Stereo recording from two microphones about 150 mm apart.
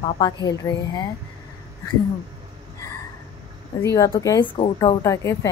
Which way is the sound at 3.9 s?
20° left (ahead or behind).